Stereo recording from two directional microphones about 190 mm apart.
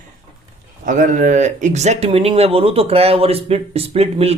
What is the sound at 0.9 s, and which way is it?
Speech, 40° right (ahead or behind).